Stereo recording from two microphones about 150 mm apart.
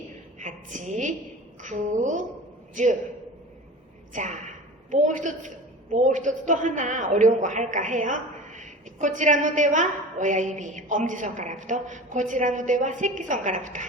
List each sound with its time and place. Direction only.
0.3 s a woman's voice: 55° right (ahead or behind)
4.1 s a man's voice: 55° right (ahead or behind)